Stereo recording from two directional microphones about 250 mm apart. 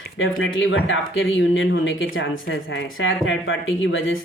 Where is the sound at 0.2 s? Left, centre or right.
Left.